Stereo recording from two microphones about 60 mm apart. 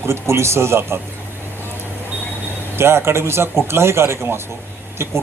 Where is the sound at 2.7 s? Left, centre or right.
Right.